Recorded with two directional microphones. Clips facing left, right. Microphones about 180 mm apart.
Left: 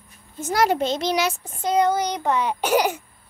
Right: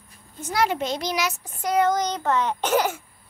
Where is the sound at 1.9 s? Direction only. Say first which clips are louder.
Left 1 dB; 10° left (ahead or behind).